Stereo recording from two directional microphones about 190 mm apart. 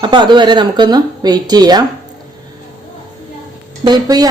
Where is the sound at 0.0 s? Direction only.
25° right (ahead or behind).